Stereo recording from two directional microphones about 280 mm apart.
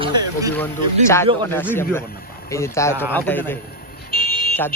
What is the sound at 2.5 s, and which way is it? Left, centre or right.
Speech, centre.